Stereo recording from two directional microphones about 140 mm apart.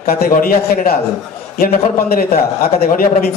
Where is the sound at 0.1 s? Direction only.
90° left.